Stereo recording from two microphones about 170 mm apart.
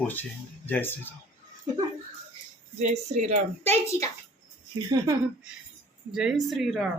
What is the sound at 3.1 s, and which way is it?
Speech, 45° right (ahead or behind).